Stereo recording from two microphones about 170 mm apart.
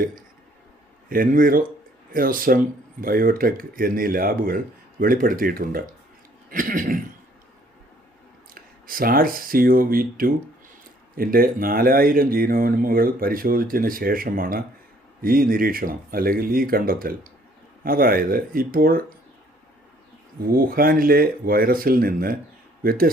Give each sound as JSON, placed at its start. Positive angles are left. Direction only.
{"t": 1.1, "sound": "speech", "side_deg": -55}
{"t": 8.5, "sound": "speech", "side_deg": -55}
{"t": 20.4, "sound": "speech", "side_deg": -60}